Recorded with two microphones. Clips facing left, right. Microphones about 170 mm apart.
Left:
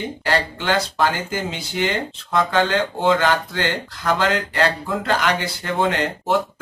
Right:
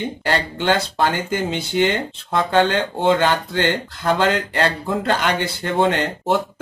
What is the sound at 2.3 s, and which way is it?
Speech, 30° right (ahead or behind).